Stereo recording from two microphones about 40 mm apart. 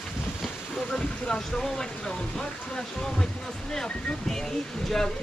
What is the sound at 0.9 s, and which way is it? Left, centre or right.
Speech, centre.